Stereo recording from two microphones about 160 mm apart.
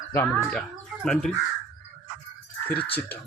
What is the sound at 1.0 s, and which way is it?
Speech, 5° left (ahead or behind).